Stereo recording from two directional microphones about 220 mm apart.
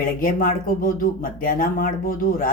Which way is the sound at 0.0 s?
40° left (ahead or behind).